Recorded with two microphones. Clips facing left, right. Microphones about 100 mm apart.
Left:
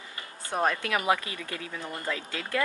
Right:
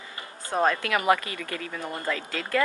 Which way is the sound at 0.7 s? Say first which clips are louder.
Right 3 dB; 90° right.